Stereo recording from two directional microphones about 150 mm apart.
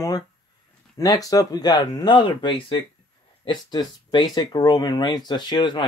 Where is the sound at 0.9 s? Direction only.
25° left (ahead or behind).